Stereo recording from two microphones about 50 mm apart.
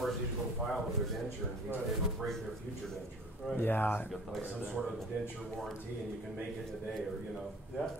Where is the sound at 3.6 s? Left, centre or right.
Left.